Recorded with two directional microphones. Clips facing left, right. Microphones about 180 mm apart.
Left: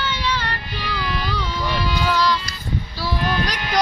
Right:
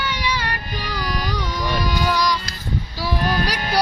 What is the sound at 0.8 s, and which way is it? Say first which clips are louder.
Music: left 2 dB; 40° right (ahead or behind).